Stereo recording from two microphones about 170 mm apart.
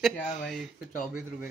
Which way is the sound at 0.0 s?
Centre (ahead or behind).